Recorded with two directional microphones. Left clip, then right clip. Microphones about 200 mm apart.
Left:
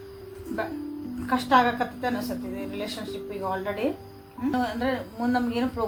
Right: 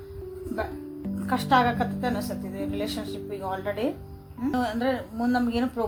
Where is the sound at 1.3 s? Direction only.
50° right (ahead or behind).